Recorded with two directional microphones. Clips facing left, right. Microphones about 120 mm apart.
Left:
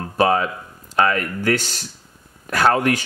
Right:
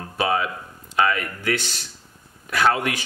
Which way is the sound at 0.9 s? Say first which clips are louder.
Left 3 dB; 45° left (ahead or behind).